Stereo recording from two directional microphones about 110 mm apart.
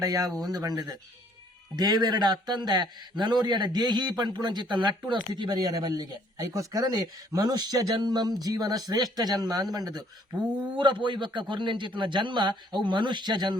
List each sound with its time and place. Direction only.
0.0 s a man's voice: 35° right (ahead or behind)